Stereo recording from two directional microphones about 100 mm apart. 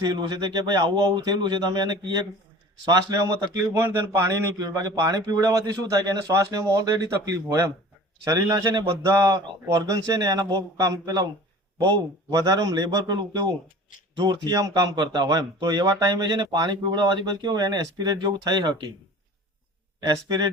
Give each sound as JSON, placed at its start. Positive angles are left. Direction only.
{"t": 0.0, "sound": "a man's voice", "side_deg": -45}
{"t": 3.6, "sound": "speech", "side_deg": -25}
{"t": 4.5, "sound": "a man's voice", "side_deg": -40}
{"t": 20.0, "sound": "speech", "side_deg": -45}